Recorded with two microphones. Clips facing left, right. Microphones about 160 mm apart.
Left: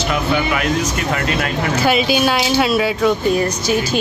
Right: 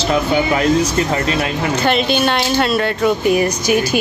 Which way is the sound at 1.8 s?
5° left (ahead or behind).